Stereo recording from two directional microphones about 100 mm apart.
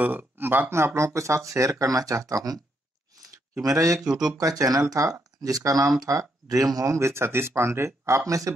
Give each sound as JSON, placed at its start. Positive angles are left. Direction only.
{"t": 0.0, "sound": "speech", "side_deg": -20}
{"t": 3.6, "sound": "speech", "side_deg": -35}
{"t": 4.0, "sound": "speech", "side_deg": -5}
{"t": 4.3, "sound": "speech", "side_deg": -35}